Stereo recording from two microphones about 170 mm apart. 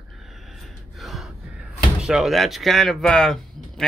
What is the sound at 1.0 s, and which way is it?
Gasp, centre (ahead or behind).